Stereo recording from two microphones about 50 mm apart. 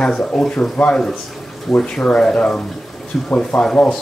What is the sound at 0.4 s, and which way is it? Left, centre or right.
Speech, centre.